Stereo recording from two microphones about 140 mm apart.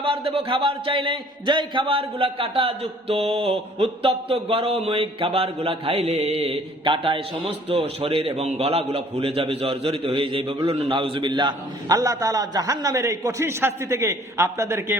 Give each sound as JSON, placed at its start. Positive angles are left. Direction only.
{"t": 0.0, "sound": "a man's voice", "side_deg": -40}